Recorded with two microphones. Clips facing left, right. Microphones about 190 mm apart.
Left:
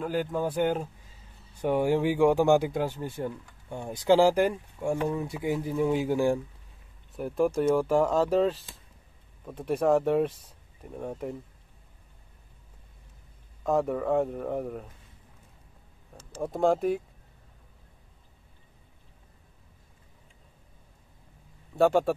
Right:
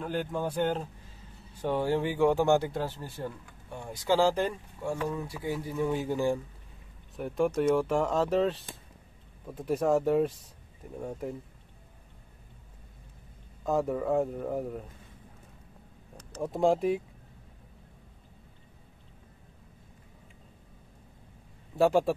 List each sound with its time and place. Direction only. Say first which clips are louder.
0.0 s speech: left 3 dB; 5° left (ahead or behind)
7.2 s speech: left 2 dB; centre (ahead or behind)
13.7 s speech: left 2 dB; centre (ahead or behind)
16.2 s a sound: left 1 dB; 30° left (ahead or behind)
16.5 s speech: left 1 dB; centre (ahead or behind)
21.7 s speech: left 1 dB; centre (ahead or behind)